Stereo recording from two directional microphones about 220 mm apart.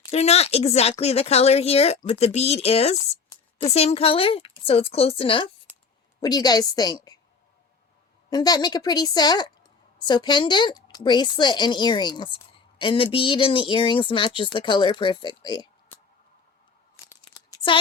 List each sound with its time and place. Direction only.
0.1 s a woman's voice: 30° left (ahead or behind)
8.3 s speech: 20° left (ahead or behind)